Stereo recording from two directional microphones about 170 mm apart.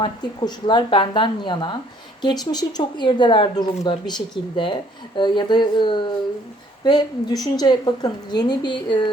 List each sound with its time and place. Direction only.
0.0 s speech: 25° left (ahead or behind)